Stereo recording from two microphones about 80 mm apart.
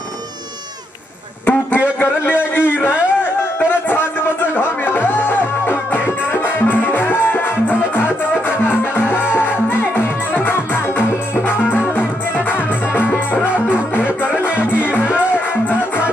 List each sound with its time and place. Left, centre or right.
1.4 s a sound: centre
4.6 s music: left
14.0 s music: centre
14.4 s music: left